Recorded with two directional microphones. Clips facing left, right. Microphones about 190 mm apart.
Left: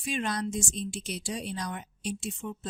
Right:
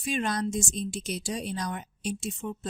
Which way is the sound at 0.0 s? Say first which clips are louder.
Right 2 dB; 45° right (ahead or behind).